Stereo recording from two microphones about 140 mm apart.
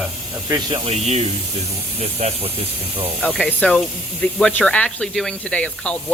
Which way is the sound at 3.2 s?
5° left (ahead or behind).